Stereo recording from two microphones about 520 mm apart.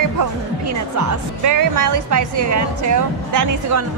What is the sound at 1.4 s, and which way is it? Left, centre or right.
A woman's voice, right.